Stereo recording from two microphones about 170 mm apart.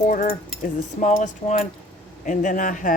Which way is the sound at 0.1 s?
50° left (ahead or behind).